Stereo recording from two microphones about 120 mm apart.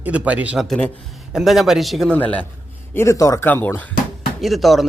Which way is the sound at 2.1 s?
10° left (ahead or behind).